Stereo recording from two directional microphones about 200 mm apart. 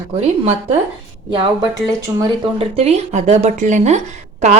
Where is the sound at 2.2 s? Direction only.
30° right (ahead or behind).